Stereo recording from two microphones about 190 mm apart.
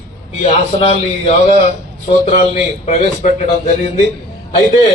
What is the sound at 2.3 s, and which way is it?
A man's voice, 35° left (ahead or behind).